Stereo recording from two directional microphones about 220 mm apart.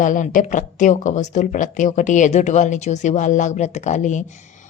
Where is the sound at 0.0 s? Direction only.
35° left (ahead or behind).